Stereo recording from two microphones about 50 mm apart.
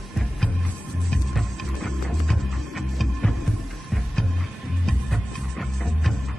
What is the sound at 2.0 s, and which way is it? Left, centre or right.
Music, centre.